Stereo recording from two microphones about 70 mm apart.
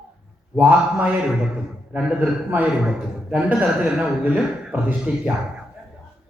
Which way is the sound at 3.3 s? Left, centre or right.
Centre.